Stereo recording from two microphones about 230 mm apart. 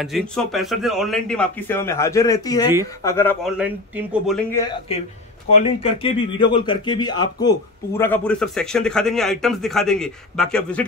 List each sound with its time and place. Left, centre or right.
0.0 s a man's voice: centre
3.4 s a man's voice: centre
5.5 s a man's voice: left; by 10.9 s centre